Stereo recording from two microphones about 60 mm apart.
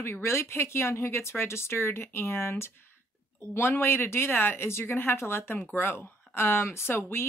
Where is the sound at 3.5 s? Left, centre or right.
Left.